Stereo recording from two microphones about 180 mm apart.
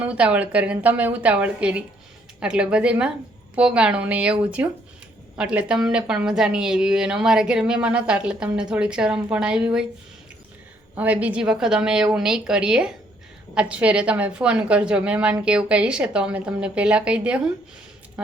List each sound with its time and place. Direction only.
0.0 s a woman's voice: 5° right (ahead or behind)
10.9 s a woman's voice: 10° right (ahead or behind)